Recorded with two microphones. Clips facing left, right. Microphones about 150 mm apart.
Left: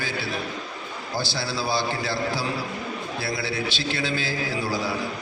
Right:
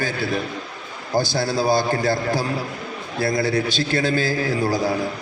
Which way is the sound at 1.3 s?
50° right (ahead or behind).